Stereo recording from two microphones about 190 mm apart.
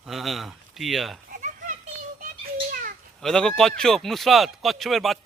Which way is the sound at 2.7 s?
50° right (ahead or behind).